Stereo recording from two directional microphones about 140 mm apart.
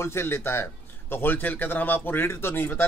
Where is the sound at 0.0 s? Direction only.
20° left (ahead or behind).